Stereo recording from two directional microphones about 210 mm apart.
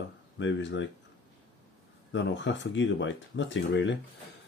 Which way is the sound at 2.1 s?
60° left (ahead or behind).